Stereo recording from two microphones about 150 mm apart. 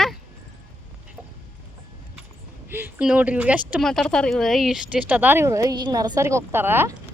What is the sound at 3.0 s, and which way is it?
Speech, 10° right (ahead or behind).